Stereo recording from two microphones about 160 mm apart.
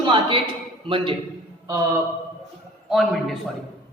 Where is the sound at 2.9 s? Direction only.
Centre (ahead or behind).